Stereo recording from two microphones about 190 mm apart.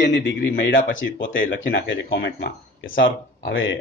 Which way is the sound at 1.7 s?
70° left (ahead or behind).